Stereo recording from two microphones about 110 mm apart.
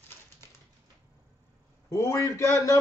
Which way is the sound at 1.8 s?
30° left (ahead or behind).